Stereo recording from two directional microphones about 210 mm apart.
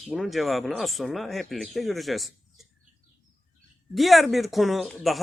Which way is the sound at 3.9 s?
Centre (ahead or behind).